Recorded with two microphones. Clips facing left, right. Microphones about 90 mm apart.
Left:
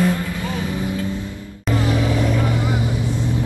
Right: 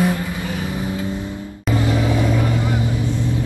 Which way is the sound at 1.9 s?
20° right (ahead or behind).